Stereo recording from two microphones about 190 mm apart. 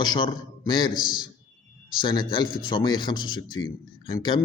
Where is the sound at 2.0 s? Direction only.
25° left (ahead or behind).